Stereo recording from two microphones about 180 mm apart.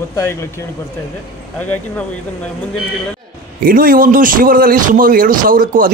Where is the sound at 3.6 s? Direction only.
50° right (ahead or behind).